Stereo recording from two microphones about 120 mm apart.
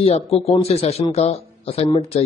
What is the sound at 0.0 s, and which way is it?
A man's voice, 55° left (ahead or behind).